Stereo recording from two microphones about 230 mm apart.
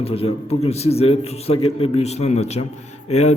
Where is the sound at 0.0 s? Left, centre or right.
Left.